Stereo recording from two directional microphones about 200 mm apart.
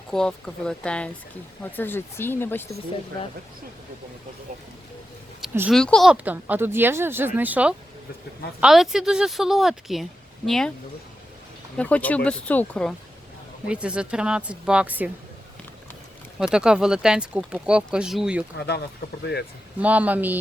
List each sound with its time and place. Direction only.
0.1 s a woman's voice: 5° left (ahead or behind)
5.4 s a sound: 5° right (ahead or behind)
5.8 s a woman's voice: centre (ahead or behind)
11.8 s speech: 5° left (ahead or behind)
13.7 s a woman's voice: 5° right (ahead or behind)
16.4 s a woman's voice: 5° right (ahead or behind)
18.5 s speech: 55° left (ahead or behind)
19.8 s speech: 5° right (ahead or behind)